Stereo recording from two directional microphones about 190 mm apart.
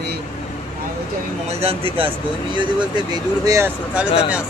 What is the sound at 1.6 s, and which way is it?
Speech, 30° right (ahead or behind).